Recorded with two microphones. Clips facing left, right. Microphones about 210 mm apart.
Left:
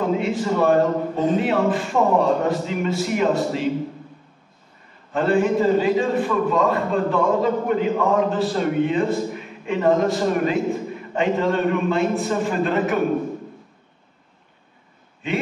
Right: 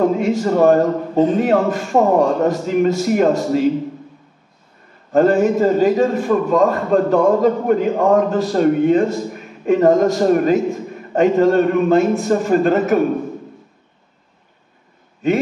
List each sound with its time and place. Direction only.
0.2 s a man's voice: 40° right (ahead or behind)
5.1 s a man's voice: 40° right (ahead or behind)
15.2 s a man's voice: 40° right (ahead or behind)